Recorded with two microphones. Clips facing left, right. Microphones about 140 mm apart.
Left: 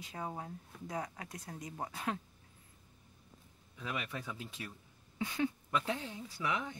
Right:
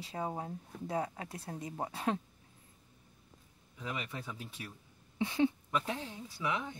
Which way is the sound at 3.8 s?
20° right (ahead or behind).